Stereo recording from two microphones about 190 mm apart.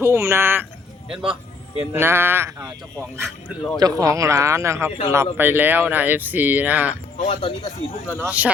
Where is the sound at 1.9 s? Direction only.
10° right (ahead or behind).